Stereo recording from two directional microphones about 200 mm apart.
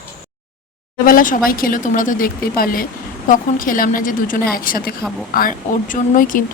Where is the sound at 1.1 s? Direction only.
45° left (ahead or behind).